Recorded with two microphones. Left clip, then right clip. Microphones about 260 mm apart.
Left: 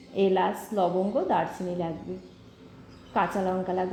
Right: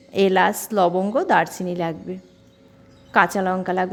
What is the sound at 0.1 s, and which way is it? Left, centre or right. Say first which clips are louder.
A woman's voice: right 7 dB; right.